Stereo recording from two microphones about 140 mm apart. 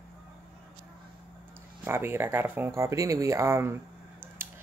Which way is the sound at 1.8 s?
15° right (ahead or behind).